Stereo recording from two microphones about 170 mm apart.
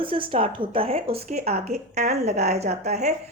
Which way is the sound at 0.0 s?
30° right (ahead or behind).